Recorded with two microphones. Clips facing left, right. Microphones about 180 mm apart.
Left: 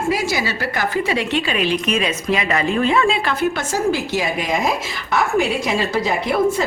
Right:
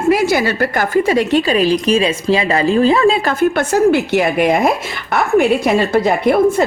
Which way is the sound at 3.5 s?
60° right (ahead or behind).